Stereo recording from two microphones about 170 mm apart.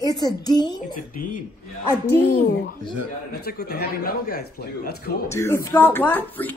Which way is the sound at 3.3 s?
70° left (ahead or behind).